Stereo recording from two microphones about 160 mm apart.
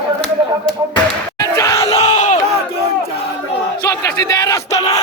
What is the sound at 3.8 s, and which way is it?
Battle cry, 20° left (ahead or behind).